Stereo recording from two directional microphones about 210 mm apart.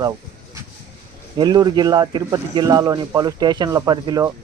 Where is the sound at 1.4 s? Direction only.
20° right (ahead or behind).